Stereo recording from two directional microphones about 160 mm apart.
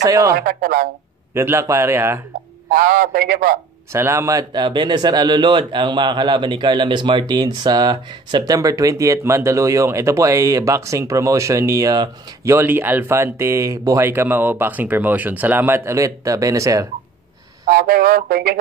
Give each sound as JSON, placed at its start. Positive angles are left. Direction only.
{"t": 0.0, "sound": "speech", "side_deg": -20}
{"t": 0.3, "sound": "a man's voice", "side_deg": -65}
{"t": 1.3, "sound": "speech", "side_deg": -15}
{"t": 2.7, "sound": "a man's voice", "side_deg": -65}
{"t": 3.9, "sound": "speech", "side_deg": -15}
{"t": 12.5, "sound": "speech", "side_deg": -10}
{"t": 17.6, "sound": "speech", "side_deg": -65}